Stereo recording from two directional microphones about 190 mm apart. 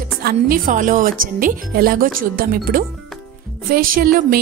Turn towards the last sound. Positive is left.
turn(degrees=-50)  # may be behind; listen again after turning